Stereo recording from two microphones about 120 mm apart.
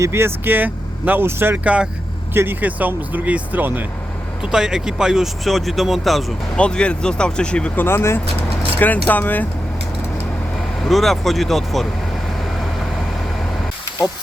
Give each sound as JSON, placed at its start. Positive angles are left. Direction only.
{"t": 0.0, "sound": "speech", "side_deg": -20}
{"t": 4.4, "sound": "speech", "side_deg": -5}
{"t": 7.9, "sound": "speech", "side_deg": 20}
{"t": 10.8, "sound": "speech", "side_deg": 0}